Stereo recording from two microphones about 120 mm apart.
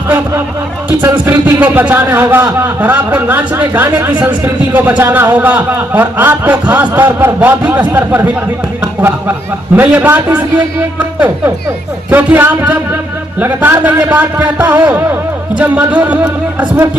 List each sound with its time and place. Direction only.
0.9 s a man's voice: 15° right (ahead or behind)